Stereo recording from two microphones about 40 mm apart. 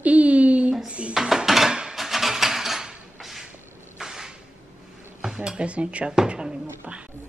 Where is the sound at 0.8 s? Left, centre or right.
Right.